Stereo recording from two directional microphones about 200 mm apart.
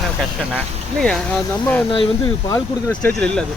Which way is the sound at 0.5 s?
5° left (ahead or behind).